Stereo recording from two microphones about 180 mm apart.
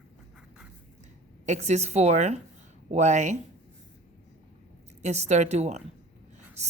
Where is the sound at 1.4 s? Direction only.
40° right (ahead or behind).